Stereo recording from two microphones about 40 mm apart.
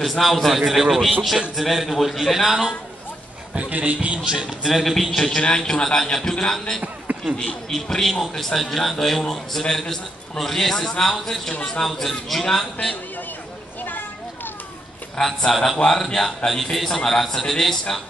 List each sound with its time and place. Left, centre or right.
0.0 s a man's voice: centre
3.5 s a man's voice: right
4.6 s a man's voice: centre
5.3 s a man's voice: left
7.1 s a sound: right
7.7 s a man's voice: centre
13.8 s a sound: left
15.1 s a man's voice: centre